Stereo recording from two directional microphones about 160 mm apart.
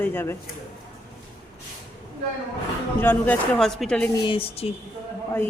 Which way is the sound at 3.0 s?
15° left (ahead or behind).